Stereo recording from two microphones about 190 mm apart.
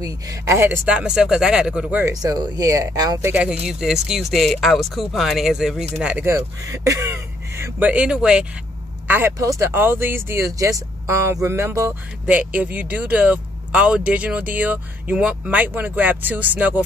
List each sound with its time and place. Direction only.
0.0 s speech: 15° right (ahead or behind)
2.2 s speech: 20° right (ahead or behind)